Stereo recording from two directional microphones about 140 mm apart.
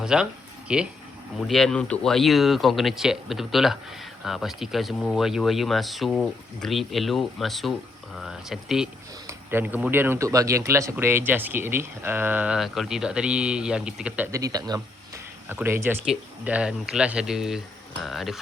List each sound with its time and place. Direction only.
0.0 s speech: 5° right (ahead or behind)
9.2 s speech: 15° right (ahead or behind)
12.5 s speech: centre (ahead or behind)
14.3 s speech: 25° right (ahead or behind); by 18.3 s centre (ahead or behind)